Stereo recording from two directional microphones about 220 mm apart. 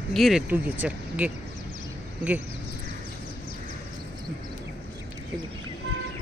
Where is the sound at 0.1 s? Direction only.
Centre (ahead or behind).